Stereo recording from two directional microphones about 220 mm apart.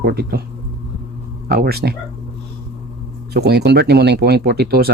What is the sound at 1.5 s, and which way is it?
Speech, 45° right (ahead or behind).